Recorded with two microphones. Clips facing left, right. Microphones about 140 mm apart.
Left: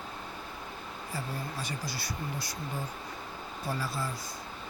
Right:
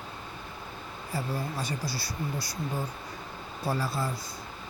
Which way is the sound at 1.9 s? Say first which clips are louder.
Right 3 dB; 35° right (ahead or behind).